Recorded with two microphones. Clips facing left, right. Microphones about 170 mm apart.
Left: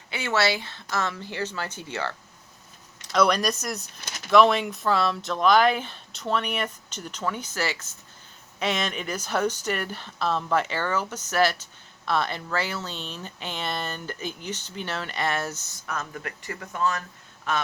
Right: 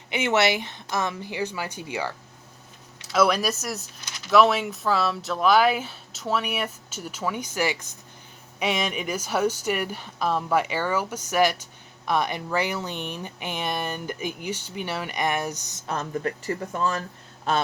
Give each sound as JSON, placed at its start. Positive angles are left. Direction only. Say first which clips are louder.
{"t": 0.1, "sound": "speech", "louder": "right 3 dB", "side_deg": -20}
{"t": 15.9, "sound": "speech", "louder": "right 6 dB", "side_deg": -30}